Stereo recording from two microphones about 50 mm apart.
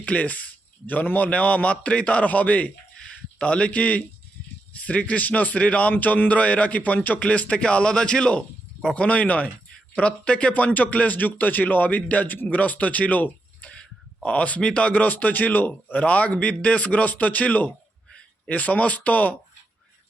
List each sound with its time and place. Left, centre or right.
0.0 s a man's voice: left